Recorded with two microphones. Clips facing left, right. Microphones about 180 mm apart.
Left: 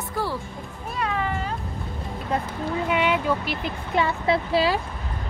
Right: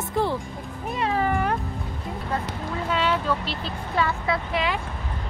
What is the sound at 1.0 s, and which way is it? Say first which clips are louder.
Cat: right 2 dB; 30° right (ahead or behind).